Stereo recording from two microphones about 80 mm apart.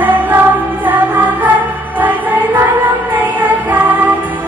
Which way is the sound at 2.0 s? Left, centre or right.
Right.